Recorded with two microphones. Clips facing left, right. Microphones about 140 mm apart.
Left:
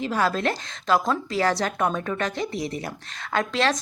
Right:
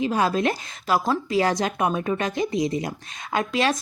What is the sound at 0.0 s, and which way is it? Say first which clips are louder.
Speech: right 2 dB; 15° right (ahead or behind).